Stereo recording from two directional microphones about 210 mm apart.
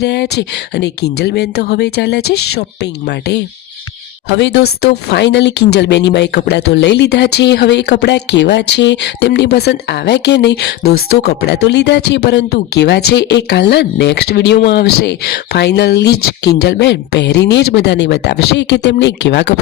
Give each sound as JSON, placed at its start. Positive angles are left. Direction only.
{"t": 0.0, "sound": "speech", "side_deg": 55}